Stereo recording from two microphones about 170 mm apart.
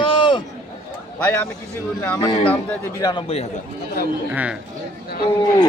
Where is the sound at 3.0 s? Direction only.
30° left (ahead or behind).